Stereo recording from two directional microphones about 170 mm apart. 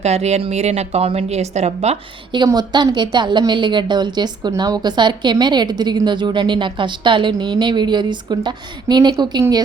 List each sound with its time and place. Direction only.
0.0 s a woman's voice: 40° right (ahead or behind)
2.3 s a woman's voice: 25° right (ahead or behind)